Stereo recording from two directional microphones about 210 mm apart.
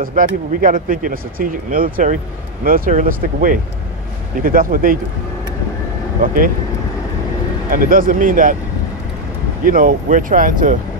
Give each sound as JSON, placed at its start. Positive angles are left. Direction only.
{"t": 0.0, "sound": "speech", "side_deg": -40}
{"t": 6.2, "sound": "speech", "side_deg": -40}
{"t": 7.7, "sound": "speech", "side_deg": -40}
{"t": 9.7, "sound": "speech", "side_deg": -40}